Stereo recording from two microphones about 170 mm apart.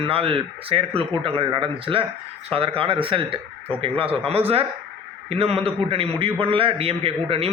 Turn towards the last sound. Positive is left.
turn(degrees=-35)  # may be behind; listen again after turning